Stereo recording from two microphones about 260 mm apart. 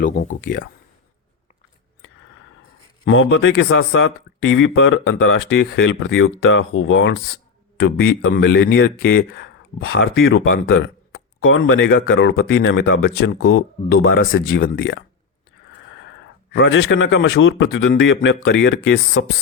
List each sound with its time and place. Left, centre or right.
0.0 s speech: left
3.1 s speech: left
14.1 s speech: left
16.5 s speech: left